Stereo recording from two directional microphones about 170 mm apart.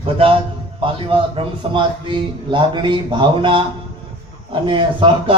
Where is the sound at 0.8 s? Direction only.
30° right (ahead or behind).